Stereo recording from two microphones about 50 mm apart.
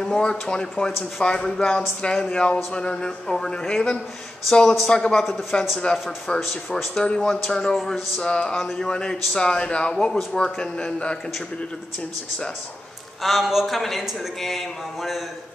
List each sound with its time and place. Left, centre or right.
0.0 s speech: centre
7.0 s speech: centre
13.2 s speech: centre